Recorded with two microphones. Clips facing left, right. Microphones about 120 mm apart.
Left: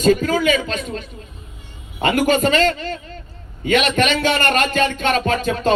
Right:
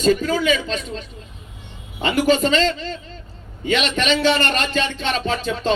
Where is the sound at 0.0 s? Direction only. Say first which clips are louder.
Left 2 dB; 45° left (ahead or behind).